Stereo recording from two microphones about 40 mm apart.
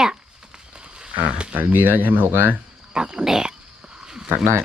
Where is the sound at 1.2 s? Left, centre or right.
Right.